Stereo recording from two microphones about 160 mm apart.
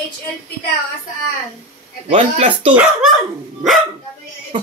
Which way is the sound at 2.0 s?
40° right (ahead or behind).